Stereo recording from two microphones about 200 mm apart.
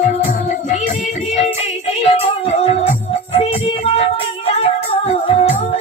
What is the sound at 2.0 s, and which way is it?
Music, 30° left (ahead or behind).